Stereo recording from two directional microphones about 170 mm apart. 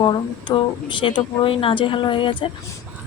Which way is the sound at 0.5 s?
25° left (ahead or behind).